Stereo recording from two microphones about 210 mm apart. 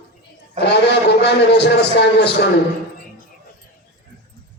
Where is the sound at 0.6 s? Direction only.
55° left (ahead or behind).